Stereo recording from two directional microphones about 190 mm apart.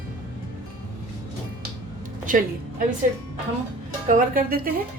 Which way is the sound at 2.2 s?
45° right (ahead or behind).